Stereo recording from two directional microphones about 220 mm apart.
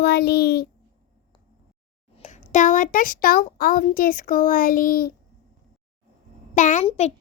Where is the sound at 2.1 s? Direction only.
35° left (ahead or behind).